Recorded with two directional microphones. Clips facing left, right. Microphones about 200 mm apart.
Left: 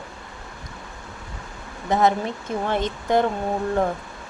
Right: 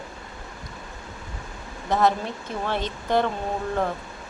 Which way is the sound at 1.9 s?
15° left (ahead or behind).